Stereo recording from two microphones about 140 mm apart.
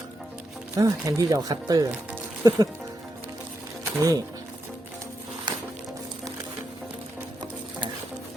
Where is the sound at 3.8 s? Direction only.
25° right (ahead or behind).